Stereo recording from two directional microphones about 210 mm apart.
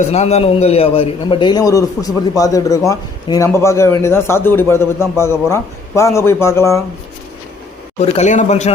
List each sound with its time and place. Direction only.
0.1 s a man's voice: 30° left (ahead or behind); by 6.8 s 15° left (ahead or behind)
7.9 s speech: 30° left (ahead or behind)